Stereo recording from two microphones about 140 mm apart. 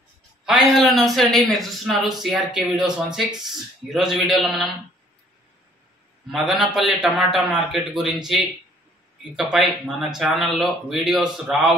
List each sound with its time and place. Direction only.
0.5 s a man's voice: centre (ahead or behind)
6.3 s a man's voice: 5° right (ahead or behind)
9.4 s a man's voice: centre (ahead or behind)